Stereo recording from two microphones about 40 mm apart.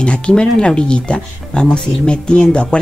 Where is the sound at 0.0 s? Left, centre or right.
Left.